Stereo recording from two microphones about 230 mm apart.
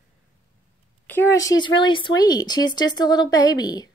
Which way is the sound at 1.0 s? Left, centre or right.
Centre.